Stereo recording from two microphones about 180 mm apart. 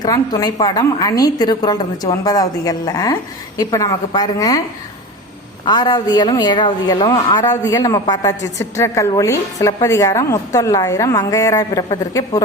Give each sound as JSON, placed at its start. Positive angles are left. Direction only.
{"t": 0.0, "sound": "a woman's voice", "side_deg": 20}
{"t": 5.6, "sound": "a woman's voice", "side_deg": 25}